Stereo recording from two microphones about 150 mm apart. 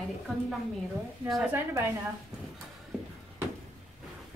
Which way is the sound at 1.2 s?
Centre (ahead or behind).